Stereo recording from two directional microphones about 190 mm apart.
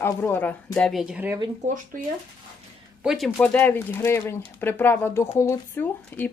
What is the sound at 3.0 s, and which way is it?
Speech, centre (ahead or behind).